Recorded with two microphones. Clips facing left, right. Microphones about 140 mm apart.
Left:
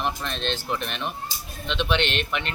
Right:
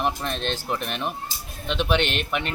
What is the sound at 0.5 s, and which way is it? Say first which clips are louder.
Speech: right 1 dB; 10° right (ahead or behind).